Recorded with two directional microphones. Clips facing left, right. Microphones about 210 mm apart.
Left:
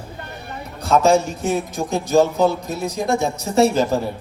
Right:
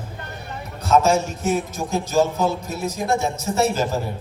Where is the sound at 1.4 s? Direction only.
15° left (ahead or behind).